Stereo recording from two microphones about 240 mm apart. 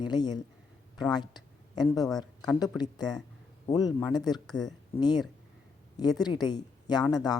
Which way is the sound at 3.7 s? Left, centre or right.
Centre.